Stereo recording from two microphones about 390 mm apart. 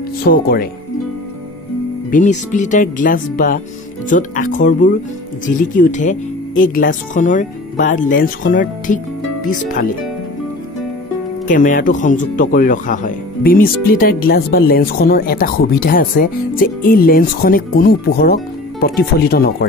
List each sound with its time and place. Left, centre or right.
0.2 s speech: left
2.0 s speech: centre
11.4 s speech: centre